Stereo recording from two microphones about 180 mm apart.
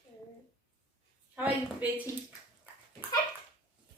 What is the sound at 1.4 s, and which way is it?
Speech, 10° right (ahead or behind).